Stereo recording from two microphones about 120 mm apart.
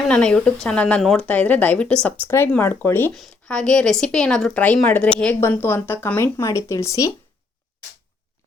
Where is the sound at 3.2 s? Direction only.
5° left (ahead or behind); by 7.1 s 25° left (ahead or behind).